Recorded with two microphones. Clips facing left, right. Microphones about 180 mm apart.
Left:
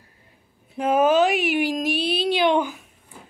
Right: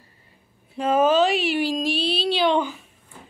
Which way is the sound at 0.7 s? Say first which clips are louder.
Even; 15° left (ahead or behind).